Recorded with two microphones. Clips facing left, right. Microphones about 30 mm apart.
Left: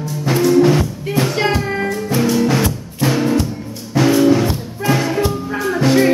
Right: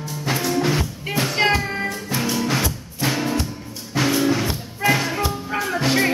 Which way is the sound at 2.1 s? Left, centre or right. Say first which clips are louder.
Left 7 dB; centre.